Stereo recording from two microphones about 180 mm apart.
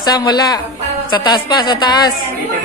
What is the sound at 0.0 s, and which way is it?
Music, 20° left (ahead or behind).